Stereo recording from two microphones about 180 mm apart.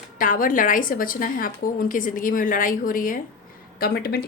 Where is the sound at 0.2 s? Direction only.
50° left (ahead or behind).